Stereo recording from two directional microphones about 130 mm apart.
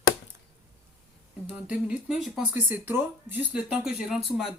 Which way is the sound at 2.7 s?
15° right (ahead or behind).